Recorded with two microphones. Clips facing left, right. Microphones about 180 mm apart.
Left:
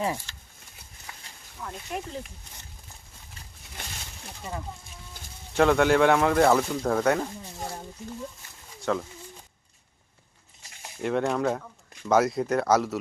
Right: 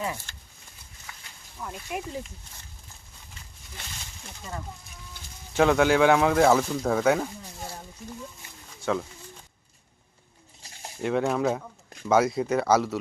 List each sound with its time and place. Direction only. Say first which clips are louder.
0.3 s a sound: even; 50° right (ahead or behind)
1.6 s speech: right 1 dB; 5° right (ahead or behind)
5.5 s speech: even; centre (ahead or behind)
8.8 s speech: even; centre (ahead or behind)
11.0 s speech: right 1 dB; centre (ahead or behind)